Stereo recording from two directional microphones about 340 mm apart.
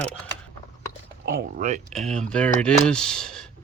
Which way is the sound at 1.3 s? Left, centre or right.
Right.